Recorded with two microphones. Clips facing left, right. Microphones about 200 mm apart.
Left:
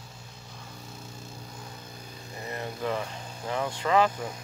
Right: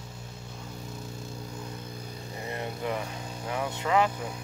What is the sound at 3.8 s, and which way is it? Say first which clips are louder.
Vehicle: left 2 dB; 15° right (ahead or behind).